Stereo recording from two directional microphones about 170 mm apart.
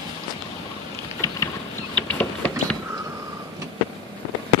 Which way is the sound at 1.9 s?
10° left (ahead or behind).